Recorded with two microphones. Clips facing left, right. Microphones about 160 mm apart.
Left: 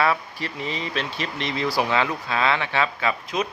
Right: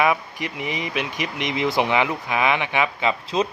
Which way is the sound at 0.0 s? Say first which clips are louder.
Right 2 dB; 15° right (ahead or behind).